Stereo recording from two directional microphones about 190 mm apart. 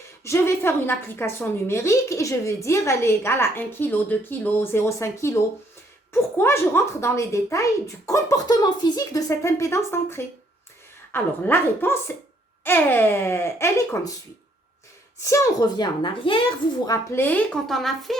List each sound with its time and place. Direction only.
0.3 s a woman's voice: 15° left (ahead or behind)
15.2 s a woman's voice: 15° left (ahead or behind)